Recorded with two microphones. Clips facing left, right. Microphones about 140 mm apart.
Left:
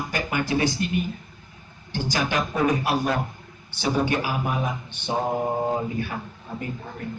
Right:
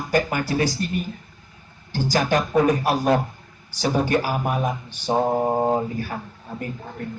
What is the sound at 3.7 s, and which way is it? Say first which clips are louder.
Speech: right 3 dB; 40° right (ahead or behind).